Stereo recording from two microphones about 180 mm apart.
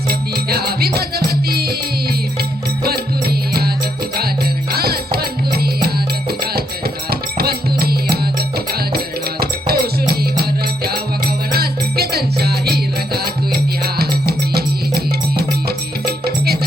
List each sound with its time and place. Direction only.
0.1 s music: 60° right (ahead or behind)
4.7 s music: 60° right (ahead or behind)
11.5 s music: 60° right (ahead or behind)